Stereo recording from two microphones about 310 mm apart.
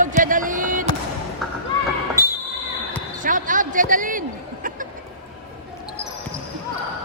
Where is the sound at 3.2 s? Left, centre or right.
Right.